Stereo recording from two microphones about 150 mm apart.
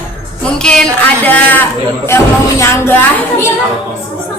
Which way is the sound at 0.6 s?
5° left (ahead or behind).